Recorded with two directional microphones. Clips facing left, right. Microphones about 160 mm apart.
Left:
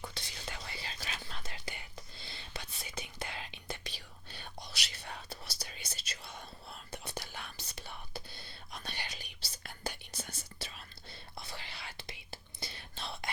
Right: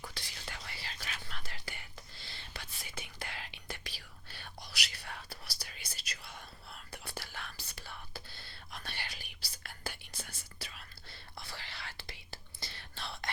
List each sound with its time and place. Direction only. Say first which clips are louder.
0.0 s whispering: left 2 dB; 25° left (ahead or behind)